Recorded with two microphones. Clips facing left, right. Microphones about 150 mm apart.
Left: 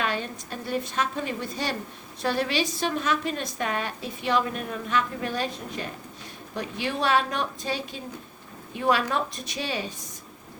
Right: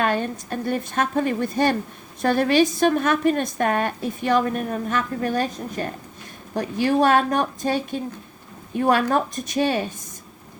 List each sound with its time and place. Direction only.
0.0 s a woman's voice: 50° right (ahead or behind)